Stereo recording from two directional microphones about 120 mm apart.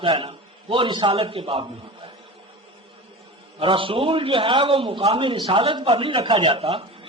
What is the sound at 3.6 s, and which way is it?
A man's voice, 45° right (ahead or behind).